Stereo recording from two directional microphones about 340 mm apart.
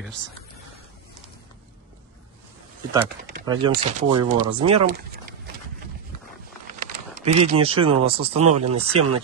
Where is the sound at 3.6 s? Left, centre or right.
Centre.